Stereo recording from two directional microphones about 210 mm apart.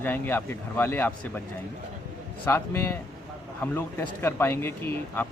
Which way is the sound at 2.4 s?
10° left (ahead or behind).